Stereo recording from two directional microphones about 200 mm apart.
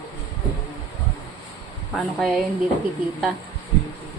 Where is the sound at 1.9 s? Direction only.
Centre (ahead or behind).